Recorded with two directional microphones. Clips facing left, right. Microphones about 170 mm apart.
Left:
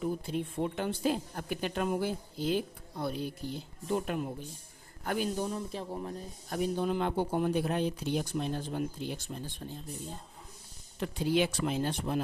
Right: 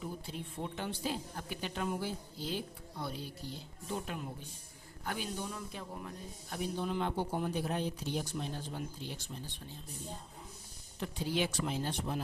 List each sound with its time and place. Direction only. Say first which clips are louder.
0.0 s a man's voice: left 9 dB; 55° left (ahead or behind)
5.5 s speech: left 7 dB; 30° left (ahead or behind)
6.5 s speech: left 6 dB; 50° left (ahead or behind)
11.0 s speech: left 6 dB; 65° left (ahead or behind)